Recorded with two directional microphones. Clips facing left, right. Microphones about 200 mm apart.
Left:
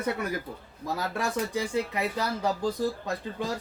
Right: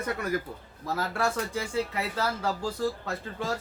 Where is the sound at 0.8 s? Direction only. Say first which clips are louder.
Right 1 dB; 15° left (ahead or behind).